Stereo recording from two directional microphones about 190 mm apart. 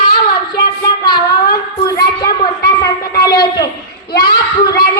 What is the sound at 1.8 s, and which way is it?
Speech, 20° left (ahead or behind).